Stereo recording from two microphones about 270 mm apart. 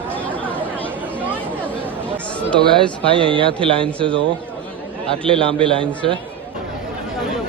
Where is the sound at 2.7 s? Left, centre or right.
Centre.